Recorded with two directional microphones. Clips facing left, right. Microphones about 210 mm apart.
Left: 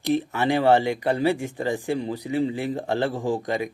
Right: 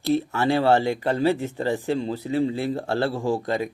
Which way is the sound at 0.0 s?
15° left (ahead or behind).